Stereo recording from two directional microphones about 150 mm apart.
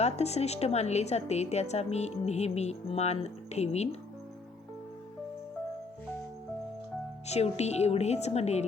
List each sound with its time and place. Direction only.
0.0 s a woman's voice: 45° left (ahead or behind)
7.3 s a woman's voice: 45° left (ahead or behind)